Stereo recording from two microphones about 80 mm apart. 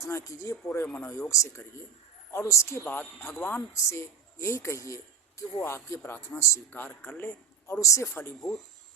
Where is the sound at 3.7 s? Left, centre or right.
Left.